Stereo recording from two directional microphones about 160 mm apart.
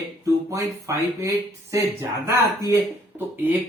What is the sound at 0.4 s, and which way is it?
Speech, 20° right (ahead or behind).